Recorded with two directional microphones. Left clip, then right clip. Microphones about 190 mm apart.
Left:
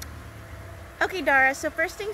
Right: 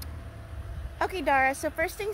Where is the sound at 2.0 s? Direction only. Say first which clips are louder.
Even; 30° right (ahead or behind).